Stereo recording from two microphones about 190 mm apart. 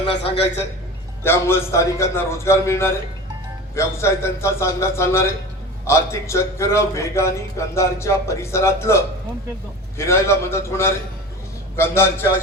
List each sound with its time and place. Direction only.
0.0 s a man's voice: 30° left (ahead or behind)
1.2 s a man's voice: 15° left (ahead or behind)